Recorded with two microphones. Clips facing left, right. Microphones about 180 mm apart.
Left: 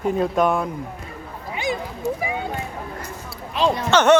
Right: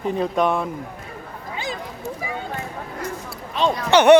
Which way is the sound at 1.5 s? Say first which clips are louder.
Left 5 dB; 15° left (ahead or behind).